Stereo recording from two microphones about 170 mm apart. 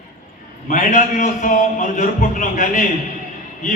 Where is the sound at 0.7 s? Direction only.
45° left (ahead or behind).